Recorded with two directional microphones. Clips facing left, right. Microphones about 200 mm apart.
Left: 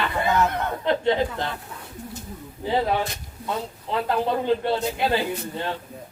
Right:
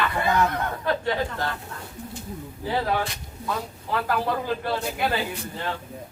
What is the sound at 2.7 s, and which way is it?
A man's voice, 20° left (ahead or behind).